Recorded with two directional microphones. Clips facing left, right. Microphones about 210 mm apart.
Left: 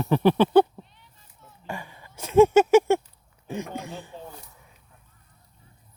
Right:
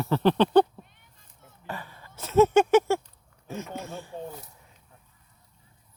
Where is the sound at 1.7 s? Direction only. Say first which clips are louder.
Left 2 dB; 15° left (ahead or behind).